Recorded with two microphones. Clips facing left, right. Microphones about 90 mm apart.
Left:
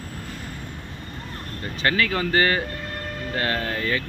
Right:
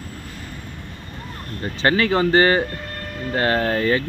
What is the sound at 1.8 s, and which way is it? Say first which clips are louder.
Speech: right 5 dB; 30° right (ahead or behind).